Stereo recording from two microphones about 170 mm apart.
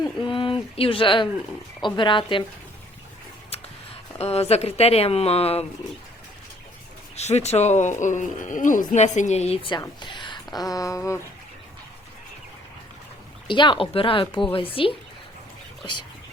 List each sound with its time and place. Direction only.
0.0 s speech: 30° left (ahead or behind)
4.2 s speech: 40° left (ahead or behind)
7.2 s speech: 40° left (ahead or behind); by 11.2 s 20° left (ahead or behind)
13.5 s speech: 30° left (ahead or behind)